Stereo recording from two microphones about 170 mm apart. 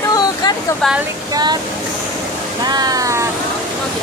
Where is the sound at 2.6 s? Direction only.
25° right (ahead or behind).